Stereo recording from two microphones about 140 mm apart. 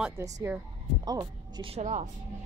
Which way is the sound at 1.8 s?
55° right (ahead or behind).